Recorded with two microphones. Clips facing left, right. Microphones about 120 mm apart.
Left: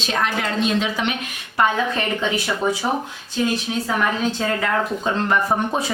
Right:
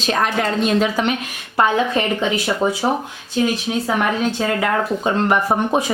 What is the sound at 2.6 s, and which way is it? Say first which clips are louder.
Speech: right 2 dB; 35° right (ahead or behind).